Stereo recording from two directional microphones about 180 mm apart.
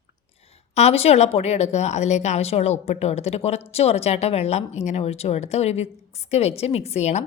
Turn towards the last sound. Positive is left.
turn(degrees=40)  # may be behind; listen again after turning